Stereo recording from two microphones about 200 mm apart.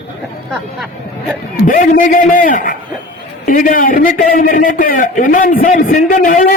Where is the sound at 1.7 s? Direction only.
45° left (ahead or behind).